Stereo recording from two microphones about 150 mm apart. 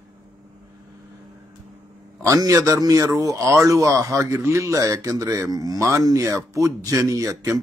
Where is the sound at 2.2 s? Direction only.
20° right (ahead or behind).